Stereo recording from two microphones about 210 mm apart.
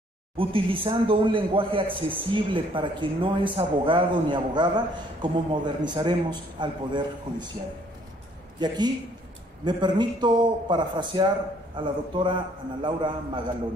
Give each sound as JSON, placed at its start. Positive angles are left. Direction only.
{"t": 0.4, "sound": "speech", "side_deg": -25}
{"t": 8.5, "sound": "speech", "side_deg": -20}